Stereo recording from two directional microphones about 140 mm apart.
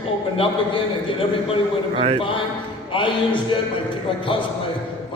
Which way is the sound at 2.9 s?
35° left (ahead or behind).